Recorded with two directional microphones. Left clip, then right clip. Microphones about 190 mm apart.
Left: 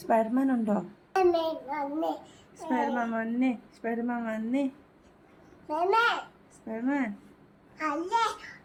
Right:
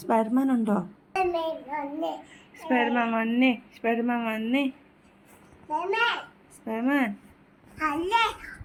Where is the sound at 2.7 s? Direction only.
25° right (ahead or behind).